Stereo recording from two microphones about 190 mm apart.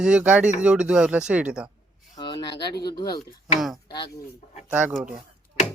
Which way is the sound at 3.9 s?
25° left (ahead or behind).